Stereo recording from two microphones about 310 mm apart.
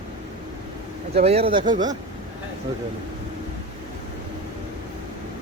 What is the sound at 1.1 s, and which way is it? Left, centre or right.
Speech, centre.